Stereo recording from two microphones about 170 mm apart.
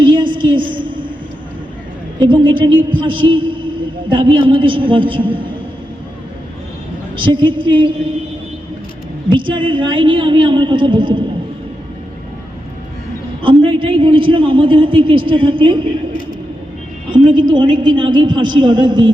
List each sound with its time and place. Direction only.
0.0 s a sound: 25° right (ahead or behind)
2.1 s a woman's voice: 30° right (ahead or behind)
7.2 s a woman's voice: 30° right (ahead or behind)
9.3 s a woman's voice: 30° right (ahead or behind)
13.4 s a man's voice: 30° right (ahead or behind)
17.1 s a woman's voice: 30° right (ahead or behind)